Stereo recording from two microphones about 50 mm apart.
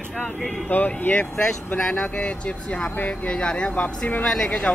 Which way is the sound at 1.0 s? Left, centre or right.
Left.